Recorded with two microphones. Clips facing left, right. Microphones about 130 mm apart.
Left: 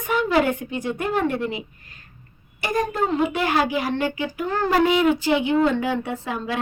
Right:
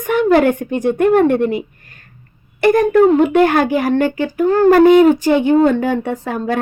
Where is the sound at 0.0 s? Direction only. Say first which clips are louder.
Right 8 dB; 55° right (ahead or behind).